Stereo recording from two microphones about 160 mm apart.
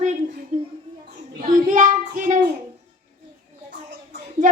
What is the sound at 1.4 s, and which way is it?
Child singing, 55° right (ahead or behind).